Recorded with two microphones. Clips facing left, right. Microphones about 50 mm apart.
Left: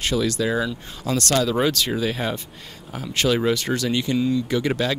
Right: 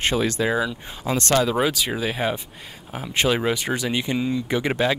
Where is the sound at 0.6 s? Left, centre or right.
Centre.